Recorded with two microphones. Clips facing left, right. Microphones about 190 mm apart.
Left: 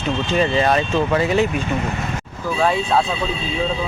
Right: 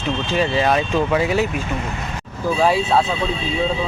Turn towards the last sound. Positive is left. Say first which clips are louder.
# right 1 dB
turn(degrees=-5)  # may be behind; listen again after turning